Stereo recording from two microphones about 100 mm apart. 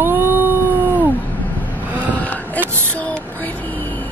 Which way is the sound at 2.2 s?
15° left (ahead or behind).